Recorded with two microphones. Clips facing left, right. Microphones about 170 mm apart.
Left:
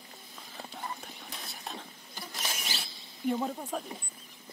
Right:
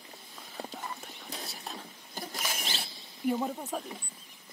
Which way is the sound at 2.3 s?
25° left (ahead or behind).